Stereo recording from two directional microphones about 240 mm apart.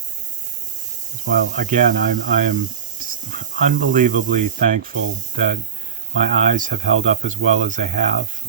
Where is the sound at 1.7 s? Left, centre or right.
Right.